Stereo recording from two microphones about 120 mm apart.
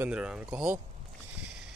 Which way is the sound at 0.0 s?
10° right (ahead or behind).